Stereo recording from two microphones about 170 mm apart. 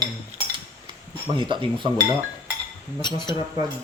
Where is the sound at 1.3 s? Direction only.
30° right (ahead or behind).